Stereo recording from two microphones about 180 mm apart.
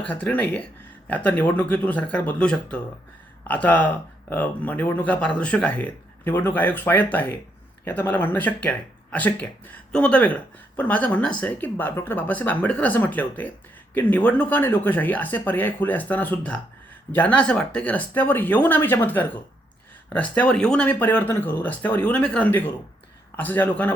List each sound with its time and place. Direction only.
0.0 s speech: 10° left (ahead or behind)